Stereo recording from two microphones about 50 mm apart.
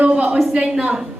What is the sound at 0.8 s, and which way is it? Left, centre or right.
Speech, centre.